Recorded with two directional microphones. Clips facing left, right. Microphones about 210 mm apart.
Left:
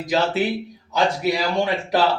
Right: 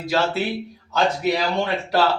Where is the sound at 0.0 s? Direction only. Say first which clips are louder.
Left 1 dB; 15° left (ahead or behind).